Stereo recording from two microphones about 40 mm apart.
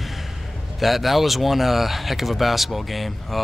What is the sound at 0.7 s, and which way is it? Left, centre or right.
Speech, centre.